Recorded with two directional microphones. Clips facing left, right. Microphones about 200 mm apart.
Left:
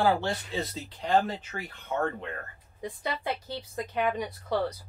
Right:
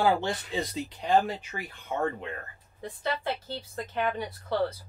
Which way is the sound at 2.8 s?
15° left (ahead or behind).